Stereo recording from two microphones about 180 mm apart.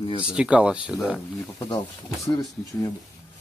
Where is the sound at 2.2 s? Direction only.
20° left (ahead or behind).